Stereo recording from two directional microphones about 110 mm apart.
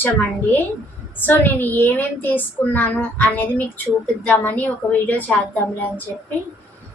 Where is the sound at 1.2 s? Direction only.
15° left (ahead or behind).